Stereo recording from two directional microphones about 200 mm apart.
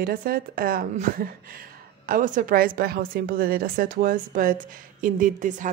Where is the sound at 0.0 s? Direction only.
45° right (ahead or behind).